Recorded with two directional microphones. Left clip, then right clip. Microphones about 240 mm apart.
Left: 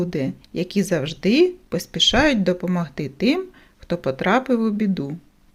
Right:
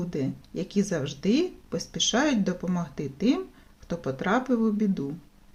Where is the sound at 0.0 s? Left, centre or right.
Left.